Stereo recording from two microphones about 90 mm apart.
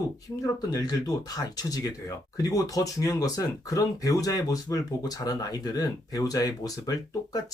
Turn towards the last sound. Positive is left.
turn(degrees=45)  # may be behind; listen again after turning